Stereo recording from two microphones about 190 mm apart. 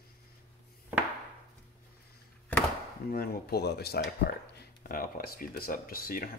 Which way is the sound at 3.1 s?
55° left (ahead or behind).